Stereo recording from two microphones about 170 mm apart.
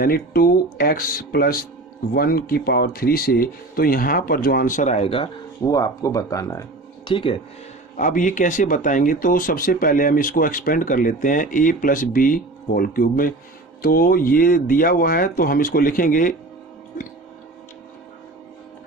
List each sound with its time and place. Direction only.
0.0 s speech: 60° left (ahead or behind); by 5.3 s 35° left (ahead or behind)
5.6 s speech: 20° left (ahead or behind)
7.9 s speech: 50° left (ahead or behind)